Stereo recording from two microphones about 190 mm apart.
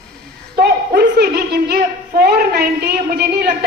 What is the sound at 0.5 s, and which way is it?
A woman's voice, 55° right (ahead or behind).